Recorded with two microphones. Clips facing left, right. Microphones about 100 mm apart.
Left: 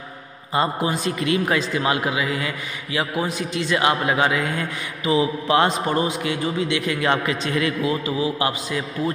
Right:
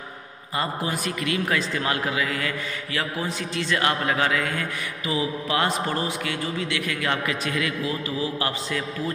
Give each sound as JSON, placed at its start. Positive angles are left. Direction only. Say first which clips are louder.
{"t": 0.6, "sound": "a man's voice", "louder": "left 5 dB", "side_deg": 20}
{"t": 5.9, "sound": "a man's voice", "louder": "left 5 dB", "side_deg": 15}